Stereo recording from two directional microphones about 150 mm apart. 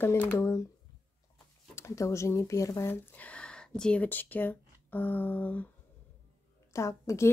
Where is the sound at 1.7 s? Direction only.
20° left (ahead or behind).